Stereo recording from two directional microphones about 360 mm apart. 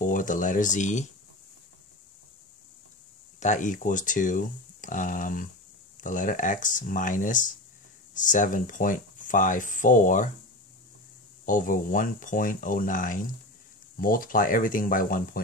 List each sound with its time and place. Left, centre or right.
0.0 s speech: left
3.3 s speech: centre
11.4 s speech: left